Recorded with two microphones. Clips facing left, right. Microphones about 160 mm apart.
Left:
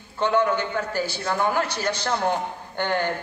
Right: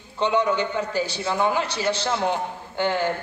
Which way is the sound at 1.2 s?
10° right (ahead or behind).